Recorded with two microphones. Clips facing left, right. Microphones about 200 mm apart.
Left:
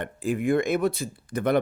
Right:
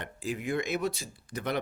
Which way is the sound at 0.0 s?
55° left (ahead or behind).